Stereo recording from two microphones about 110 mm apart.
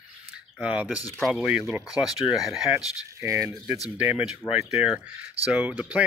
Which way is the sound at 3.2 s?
25° right (ahead or behind).